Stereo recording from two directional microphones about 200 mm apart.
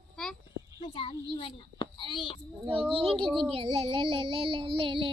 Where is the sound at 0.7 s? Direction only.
30° left (ahead or behind).